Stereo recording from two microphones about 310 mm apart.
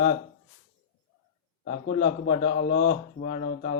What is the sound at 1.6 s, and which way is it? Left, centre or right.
A man's voice, left.